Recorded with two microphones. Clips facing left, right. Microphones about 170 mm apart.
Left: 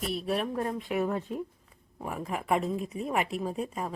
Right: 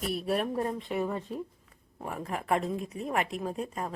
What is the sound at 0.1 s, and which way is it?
Speech, centre (ahead or behind).